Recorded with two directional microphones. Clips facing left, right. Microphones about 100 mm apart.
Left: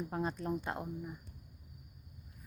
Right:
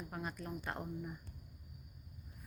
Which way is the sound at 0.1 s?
30° left (ahead or behind).